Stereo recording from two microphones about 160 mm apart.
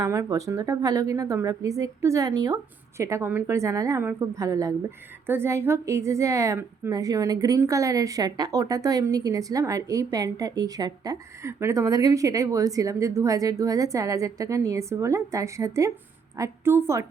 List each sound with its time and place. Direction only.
0.0 s a woman's voice: 20° right (ahead or behind)